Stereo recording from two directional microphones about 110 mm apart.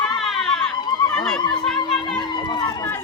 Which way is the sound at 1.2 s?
5° left (ahead or behind).